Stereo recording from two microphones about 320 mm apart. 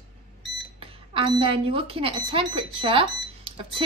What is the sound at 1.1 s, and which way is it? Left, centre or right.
A woman's voice, centre.